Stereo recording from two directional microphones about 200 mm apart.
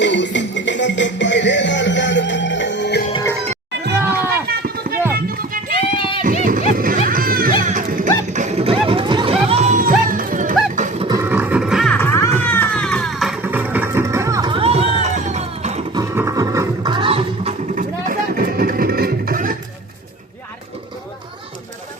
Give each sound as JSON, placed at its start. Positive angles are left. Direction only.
{"t": 0.0, "sound": "music", "side_deg": 65}
{"t": 4.4, "sound": "run", "side_deg": -50}
{"t": 5.1, "sound": "music", "side_deg": -45}
{"t": 5.7, "sound": "a sound", "side_deg": 25}
{"t": 6.2, "sound": "music", "side_deg": -40}
{"t": 11.0, "sound": "horse", "side_deg": -15}
{"t": 11.9, "sound": "music", "side_deg": 15}
{"t": 16.0, "sound": "music", "side_deg": -15}
{"t": 17.7, "sound": "music", "side_deg": -45}